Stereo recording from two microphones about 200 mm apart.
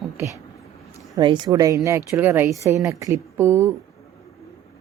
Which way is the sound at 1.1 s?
20° right (ahead or behind).